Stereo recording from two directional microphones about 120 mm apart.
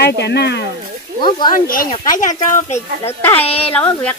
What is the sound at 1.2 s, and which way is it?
Speech, 40° left (ahead or behind).